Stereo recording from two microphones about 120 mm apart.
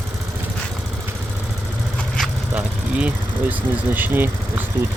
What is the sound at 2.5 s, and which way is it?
Speech, 10° right (ahead or behind).